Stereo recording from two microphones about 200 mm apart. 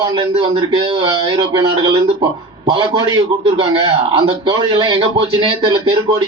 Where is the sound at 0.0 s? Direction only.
25° right (ahead or behind).